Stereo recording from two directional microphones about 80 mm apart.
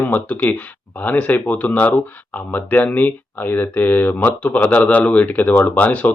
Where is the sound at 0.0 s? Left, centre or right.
Left.